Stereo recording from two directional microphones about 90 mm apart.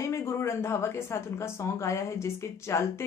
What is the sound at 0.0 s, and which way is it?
Speech, 30° left (ahead or behind).